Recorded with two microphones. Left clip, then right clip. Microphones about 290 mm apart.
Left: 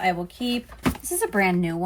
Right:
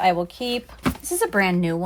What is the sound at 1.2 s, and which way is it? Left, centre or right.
Speech, right.